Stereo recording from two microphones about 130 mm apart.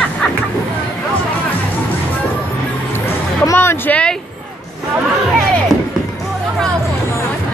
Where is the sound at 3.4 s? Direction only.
20° left (ahead or behind).